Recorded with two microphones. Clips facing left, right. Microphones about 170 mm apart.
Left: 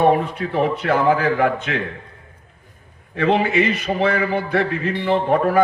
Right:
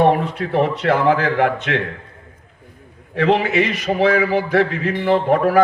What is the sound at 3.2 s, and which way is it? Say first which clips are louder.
A man's voice: right 1 dB; 70° right (ahead or behind).